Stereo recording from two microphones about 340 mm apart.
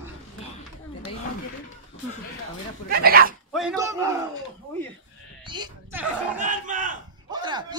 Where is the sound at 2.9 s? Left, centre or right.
Right.